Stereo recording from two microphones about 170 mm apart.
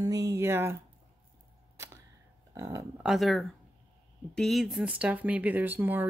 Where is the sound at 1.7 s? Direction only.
15° right (ahead or behind).